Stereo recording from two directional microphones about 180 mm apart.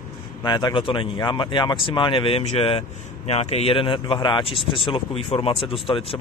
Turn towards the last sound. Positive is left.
turn(degrees=30)  # may be behind; listen again after turning